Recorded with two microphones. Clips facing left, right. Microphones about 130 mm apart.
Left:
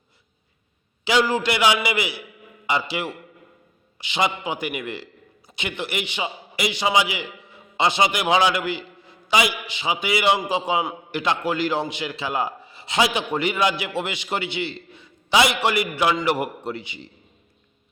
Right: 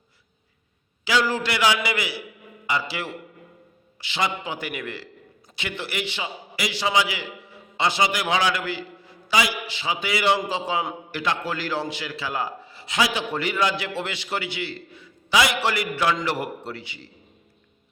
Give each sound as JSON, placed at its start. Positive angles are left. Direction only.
{"t": 1.0, "sound": "a man's voice", "side_deg": 20}